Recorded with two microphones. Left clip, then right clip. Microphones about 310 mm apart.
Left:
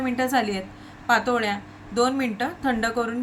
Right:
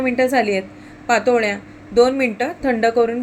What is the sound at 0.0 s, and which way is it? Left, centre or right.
A woman's voice, left.